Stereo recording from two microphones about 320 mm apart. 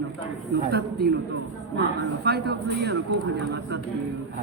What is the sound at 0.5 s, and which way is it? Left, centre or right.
Speech, right.